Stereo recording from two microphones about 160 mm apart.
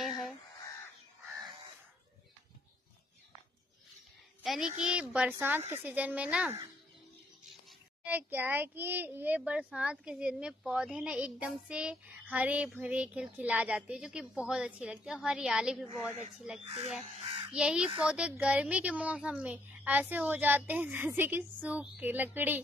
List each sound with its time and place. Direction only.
4.4 s a child's voice: 5° right (ahead or behind)
8.0 s a child's voice: 10° right (ahead or behind)
16.6 s speech: 30° right (ahead or behind)
17.6 s a child's voice: 5° right (ahead or behind)